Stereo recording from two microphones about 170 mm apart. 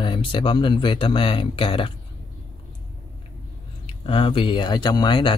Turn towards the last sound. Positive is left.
turn(degrees=25)  # may be behind; listen again after turning